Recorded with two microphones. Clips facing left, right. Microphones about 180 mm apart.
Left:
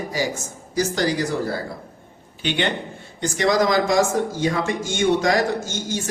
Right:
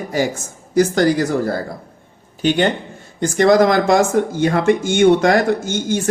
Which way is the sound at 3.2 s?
55° right (ahead or behind).